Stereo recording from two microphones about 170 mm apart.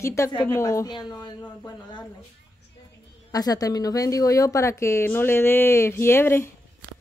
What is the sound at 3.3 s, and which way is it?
A woman's voice, 20° left (ahead or behind).